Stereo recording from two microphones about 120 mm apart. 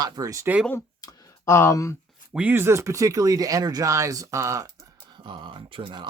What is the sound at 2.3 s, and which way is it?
Speech, 15° right (ahead or behind).